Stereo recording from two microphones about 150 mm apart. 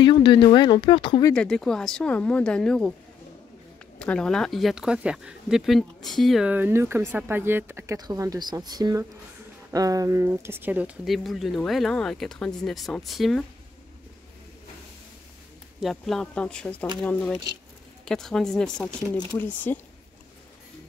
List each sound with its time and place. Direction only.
0.0 s speech: 30° left (ahead or behind)
1.3 s speech: 5° left (ahead or behind)
4.0 s speech: 5° left (ahead or behind)
15.8 s speech: centre (ahead or behind)